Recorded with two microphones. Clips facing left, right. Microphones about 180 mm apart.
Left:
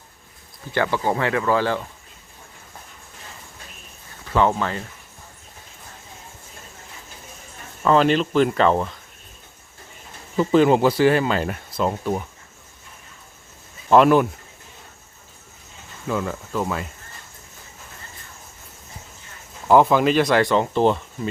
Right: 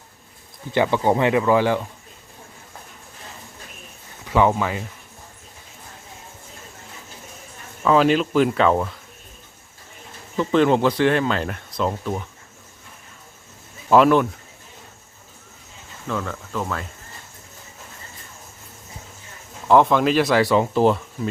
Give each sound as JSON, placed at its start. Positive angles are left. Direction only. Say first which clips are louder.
{"t": 0.7, "sound": "speech", "louder": "right 3 dB", "side_deg": -20}
{"t": 4.3, "sound": "speech", "louder": "right 1 dB", "side_deg": -10}
{"t": 7.9, "sound": "speech", "louder": "even", "side_deg": -5}
{"t": 10.3, "sound": "speech", "louder": "left 2 dB", "side_deg": 5}
{"t": 13.9, "sound": "speech", "louder": "even", "side_deg": 0}
{"t": 16.0, "sound": "cricket", "louder": "left 2 dB", "side_deg": 10}
{"t": 19.6, "sound": "speech", "louder": "left 1 dB", "side_deg": 5}